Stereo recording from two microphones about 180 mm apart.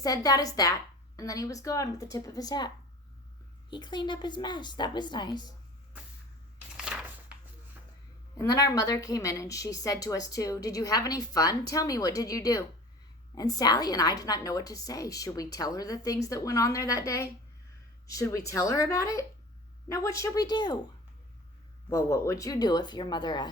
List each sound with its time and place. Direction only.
0.0 s a woman's voice: 20° left (ahead or behind)
6.7 s a sound: 5° right (ahead or behind)
8.4 s a woman's voice: 20° left (ahead or behind)
21.8 s a woman's voice: 20° left (ahead or behind)